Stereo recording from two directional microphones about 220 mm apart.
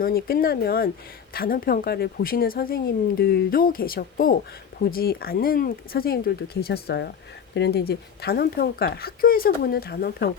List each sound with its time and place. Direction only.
0.0 s a woman's voice: 40° left (ahead or behind)